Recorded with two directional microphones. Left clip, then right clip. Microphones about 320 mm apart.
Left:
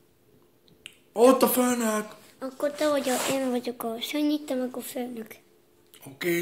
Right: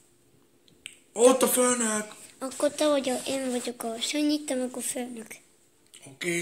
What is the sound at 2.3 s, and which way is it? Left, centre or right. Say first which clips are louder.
Speech: right 2 dB; centre.